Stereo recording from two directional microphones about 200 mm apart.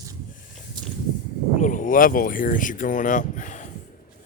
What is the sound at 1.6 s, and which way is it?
Speech, 40° left (ahead or behind).